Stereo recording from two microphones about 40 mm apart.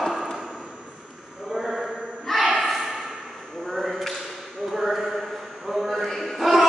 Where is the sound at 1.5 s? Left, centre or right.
Centre.